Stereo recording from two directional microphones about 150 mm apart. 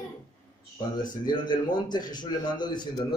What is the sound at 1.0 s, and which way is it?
A man's voice, 30° left (ahead or behind).